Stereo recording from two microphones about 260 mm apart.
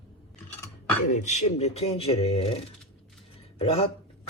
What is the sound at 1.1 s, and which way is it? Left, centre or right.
Speech, left.